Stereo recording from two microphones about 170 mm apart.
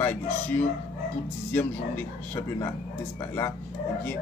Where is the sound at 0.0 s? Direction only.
10° left (ahead or behind).